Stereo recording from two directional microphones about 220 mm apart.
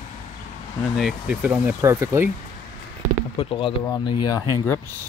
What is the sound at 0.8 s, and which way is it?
Speech, centre (ahead or behind).